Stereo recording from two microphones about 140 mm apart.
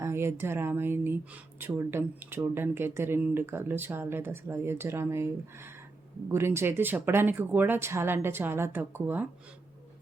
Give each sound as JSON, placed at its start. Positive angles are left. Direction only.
{"t": 0.0, "sound": "speech", "side_deg": -20}